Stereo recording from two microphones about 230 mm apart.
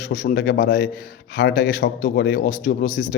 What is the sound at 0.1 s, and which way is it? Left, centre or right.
A man's voice, left.